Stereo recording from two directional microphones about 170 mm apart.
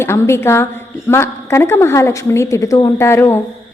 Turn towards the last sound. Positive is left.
turn(degrees=15)  # may be behind; listen again after turning